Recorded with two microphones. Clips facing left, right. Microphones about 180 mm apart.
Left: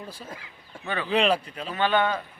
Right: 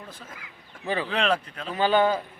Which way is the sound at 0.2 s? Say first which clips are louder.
Left 4 dB; 30° left (ahead or behind).